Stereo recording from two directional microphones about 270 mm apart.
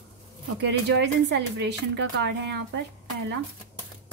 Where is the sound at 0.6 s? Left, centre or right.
Right.